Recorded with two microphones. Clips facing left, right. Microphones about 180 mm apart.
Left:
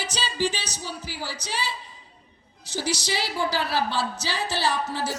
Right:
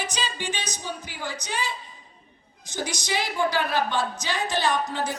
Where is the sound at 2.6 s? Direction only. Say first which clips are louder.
Left 2 dB; 35° left (ahead or behind).